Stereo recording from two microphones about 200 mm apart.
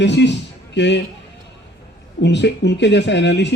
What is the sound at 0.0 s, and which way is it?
A man's voice, 60° left (ahead or behind).